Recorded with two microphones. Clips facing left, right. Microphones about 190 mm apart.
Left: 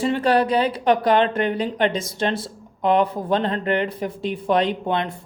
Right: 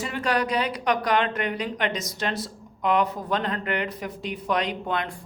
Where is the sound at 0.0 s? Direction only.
30° left (ahead or behind).